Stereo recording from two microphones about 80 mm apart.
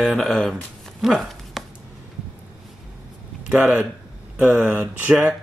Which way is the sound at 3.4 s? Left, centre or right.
Centre.